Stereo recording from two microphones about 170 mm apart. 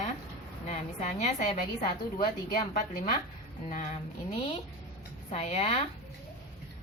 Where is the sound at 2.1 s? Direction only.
55° left (ahead or behind).